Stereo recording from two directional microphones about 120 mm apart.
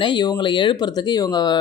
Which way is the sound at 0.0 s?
40° left (ahead or behind).